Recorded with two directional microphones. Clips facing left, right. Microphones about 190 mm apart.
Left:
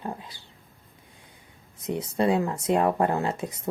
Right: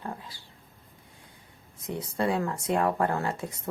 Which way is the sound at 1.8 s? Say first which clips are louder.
Left 4 dB; 20° left (ahead or behind).